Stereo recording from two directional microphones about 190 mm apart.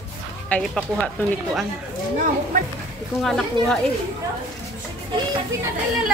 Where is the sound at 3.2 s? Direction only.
Centre (ahead or behind).